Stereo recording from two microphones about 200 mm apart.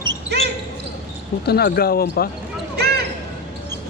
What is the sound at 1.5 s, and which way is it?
Speech, 50° left (ahead or behind).